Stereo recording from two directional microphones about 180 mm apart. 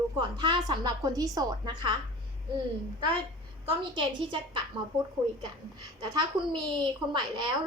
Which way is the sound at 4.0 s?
25° right (ahead or behind).